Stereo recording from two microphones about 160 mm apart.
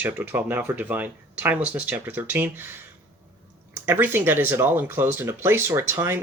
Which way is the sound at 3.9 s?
10° right (ahead or behind).